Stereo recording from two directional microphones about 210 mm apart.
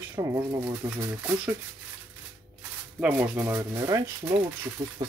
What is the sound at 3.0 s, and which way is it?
Speech, 10° right (ahead or behind).